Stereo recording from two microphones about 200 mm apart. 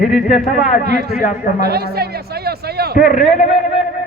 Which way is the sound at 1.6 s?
50° right (ahead or behind).